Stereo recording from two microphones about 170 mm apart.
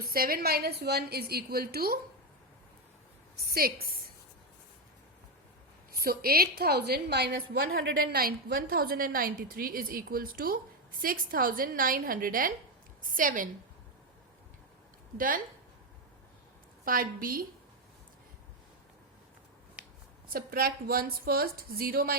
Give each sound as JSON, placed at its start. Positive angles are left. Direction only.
{"t": 0.0, "sound": "a woman's voice", "side_deg": -60}
{"t": 3.3, "sound": "a sound", "side_deg": -65}
{"t": 6.0, "sound": "a woman's voice", "side_deg": -60}
{"t": 16.8, "sound": "a woman's voice", "side_deg": -55}
{"t": 19.8, "sound": "a sound", "side_deg": -10}
{"t": 20.3, "sound": "a woman's voice", "side_deg": -60}